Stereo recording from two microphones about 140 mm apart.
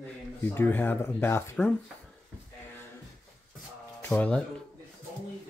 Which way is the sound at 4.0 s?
15° left (ahead or behind).